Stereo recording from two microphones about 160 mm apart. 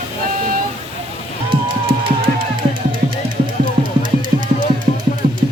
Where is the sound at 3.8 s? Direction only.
30° right (ahead or behind).